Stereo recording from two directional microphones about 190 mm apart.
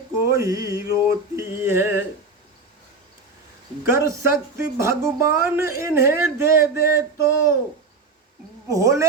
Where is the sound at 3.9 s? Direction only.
15° right (ahead or behind).